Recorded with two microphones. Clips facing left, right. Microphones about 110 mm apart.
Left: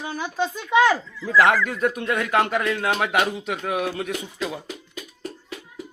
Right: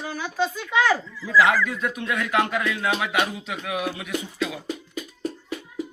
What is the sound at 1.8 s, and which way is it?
A man's voice, 45° left (ahead or behind).